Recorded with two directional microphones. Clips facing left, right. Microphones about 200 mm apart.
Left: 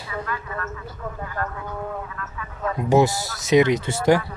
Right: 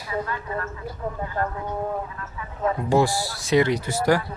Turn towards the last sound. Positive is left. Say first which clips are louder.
# left 2 dB
turn(degrees=25)  # may be behind; listen again after turning